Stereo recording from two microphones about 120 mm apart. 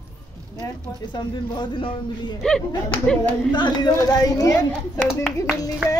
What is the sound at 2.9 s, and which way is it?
Speech, 15° left (ahead or behind).